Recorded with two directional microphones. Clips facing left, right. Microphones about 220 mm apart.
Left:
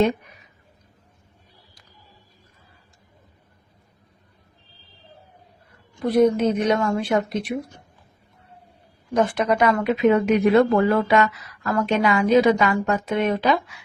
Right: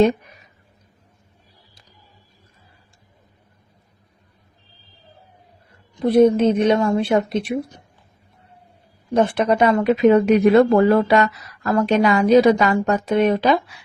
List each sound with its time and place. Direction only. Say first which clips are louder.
6.0 s a woman's voice: right 4 dB; 30° right (ahead or behind)
9.1 s speech: right 3 dB; 30° right (ahead or behind)